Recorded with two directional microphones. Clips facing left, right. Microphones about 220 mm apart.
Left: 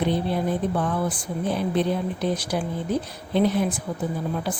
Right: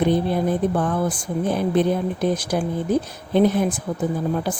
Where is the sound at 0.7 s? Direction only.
45° right (ahead or behind).